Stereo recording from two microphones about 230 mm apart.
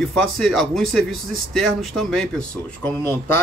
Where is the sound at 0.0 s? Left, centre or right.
Centre.